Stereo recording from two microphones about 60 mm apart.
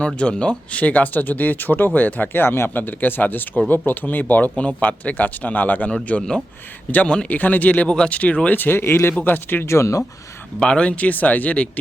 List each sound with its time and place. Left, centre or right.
0.0 s speech: centre
2.3 s speech: left
8.4 s speech: left
9.2 s speech: left
9.6 s speech: left
10.6 s speech: centre